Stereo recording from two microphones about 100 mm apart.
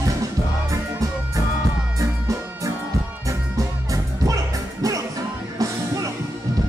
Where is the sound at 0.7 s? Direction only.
35° right (ahead or behind).